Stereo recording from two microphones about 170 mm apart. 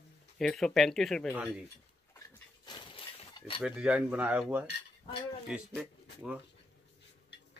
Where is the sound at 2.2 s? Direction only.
25° left (ahead or behind).